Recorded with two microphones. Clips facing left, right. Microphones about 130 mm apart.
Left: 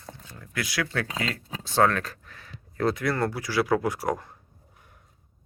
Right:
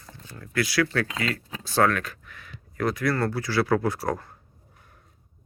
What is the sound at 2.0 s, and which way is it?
Speech, 35° left (ahead or behind).